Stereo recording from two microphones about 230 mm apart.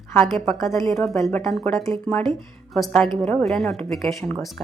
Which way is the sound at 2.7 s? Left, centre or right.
Centre.